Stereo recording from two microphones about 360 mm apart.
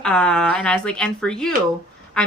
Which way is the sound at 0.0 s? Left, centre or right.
Centre.